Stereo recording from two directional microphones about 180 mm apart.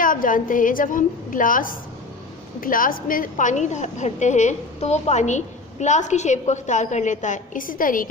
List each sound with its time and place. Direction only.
0.0 s a woman's voice: 50° left (ahead or behind)